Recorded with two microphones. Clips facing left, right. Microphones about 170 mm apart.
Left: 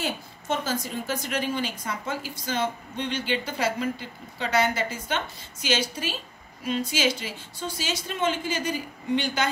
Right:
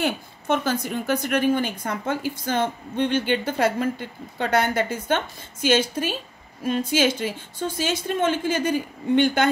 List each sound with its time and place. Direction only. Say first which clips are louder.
0.0 s a woman's voice: right 6 dB; 60° right (ahead or behind)